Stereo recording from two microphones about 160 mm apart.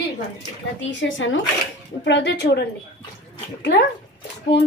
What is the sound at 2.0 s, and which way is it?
Speech, 90° left.